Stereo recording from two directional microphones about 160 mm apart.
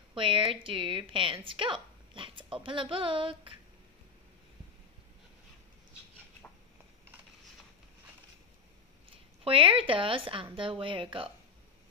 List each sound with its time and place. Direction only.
0.1 s a woman's voice: 35° right (ahead or behind)
9.1 s a woman's voice: 35° right (ahead or behind)